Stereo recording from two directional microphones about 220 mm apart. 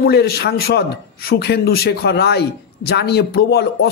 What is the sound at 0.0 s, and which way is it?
A man's voice, 45° left (ahead or behind).